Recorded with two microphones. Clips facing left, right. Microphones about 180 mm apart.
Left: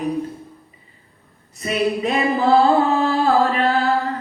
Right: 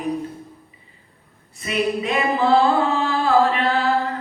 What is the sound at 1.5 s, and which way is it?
Singing, 40° left (ahead or behind).